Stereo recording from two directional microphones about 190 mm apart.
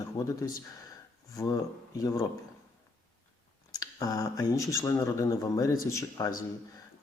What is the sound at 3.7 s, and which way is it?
Speech, 20° left (ahead or behind).